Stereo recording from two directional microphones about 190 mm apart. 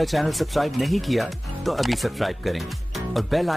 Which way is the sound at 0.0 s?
Centre (ahead or behind).